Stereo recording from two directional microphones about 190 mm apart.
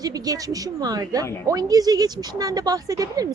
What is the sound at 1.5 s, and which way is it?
Speech, 20° right (ahead or behind).